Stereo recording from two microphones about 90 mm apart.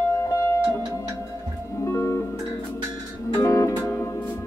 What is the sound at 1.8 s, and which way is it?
Music, 30° left (ahead or behind).